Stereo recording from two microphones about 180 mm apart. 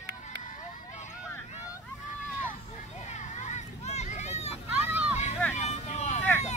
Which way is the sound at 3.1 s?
40° left (ahead or behind).